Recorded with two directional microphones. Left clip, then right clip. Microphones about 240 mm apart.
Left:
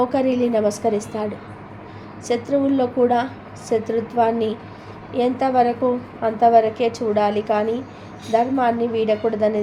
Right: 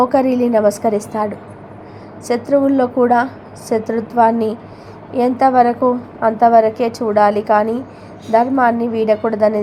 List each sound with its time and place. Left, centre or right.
0.0 s a woman's voice: centre